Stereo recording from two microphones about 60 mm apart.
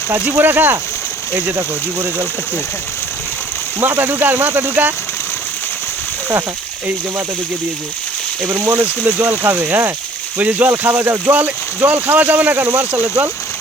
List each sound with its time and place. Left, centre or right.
0.3 s speech: right
3.8 s speech: right
8.8 s speech: right
10.7 s speech: right